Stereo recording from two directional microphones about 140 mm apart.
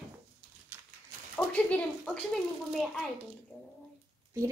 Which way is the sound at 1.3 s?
5° left (ahead or behind).